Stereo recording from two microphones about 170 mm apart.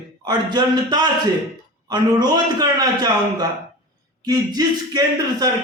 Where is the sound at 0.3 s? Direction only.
25° right (ahead or behind).